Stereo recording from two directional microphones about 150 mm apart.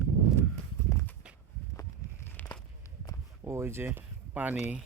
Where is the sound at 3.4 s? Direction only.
15° right (ahead or behind).